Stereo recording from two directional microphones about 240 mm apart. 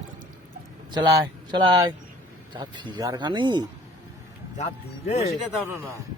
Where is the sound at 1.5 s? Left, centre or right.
Centre.